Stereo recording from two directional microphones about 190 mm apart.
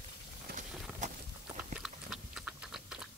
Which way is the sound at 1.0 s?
40° right (ahead or behind).